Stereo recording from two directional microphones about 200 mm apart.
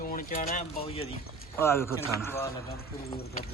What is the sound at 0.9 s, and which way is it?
Speech, 30° left (ahead or behind).